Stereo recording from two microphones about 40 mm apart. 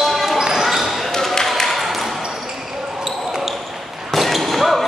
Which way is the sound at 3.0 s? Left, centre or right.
Centre.